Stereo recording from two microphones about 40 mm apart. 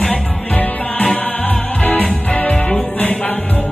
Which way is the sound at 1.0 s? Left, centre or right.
Left.